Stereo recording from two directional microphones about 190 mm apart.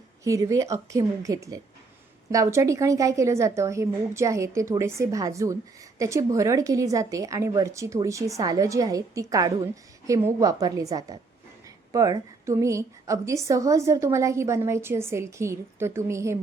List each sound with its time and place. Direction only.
0.3 s a woman's voice: 15° right (ahead or behind)